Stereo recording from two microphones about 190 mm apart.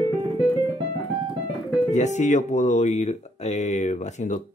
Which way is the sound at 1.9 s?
40° left (ahead or behind).